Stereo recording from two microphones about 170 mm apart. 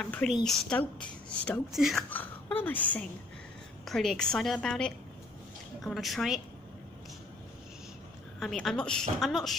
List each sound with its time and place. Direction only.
0.0 s a woman's voice: 5° left (ahead or behind)
2.0 s a woman's voice: 10° left (ahead or behind)
8.4 s a woman's voice: centre (ahead or behind)